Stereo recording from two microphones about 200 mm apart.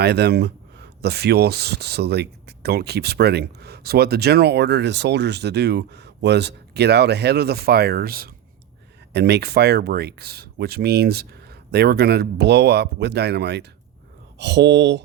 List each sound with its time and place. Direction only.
0.0 s speech: 55° right (ahead or behind)